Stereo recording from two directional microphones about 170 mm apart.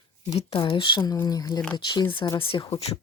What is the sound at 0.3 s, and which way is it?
Speech, 30° left (ahead or behind).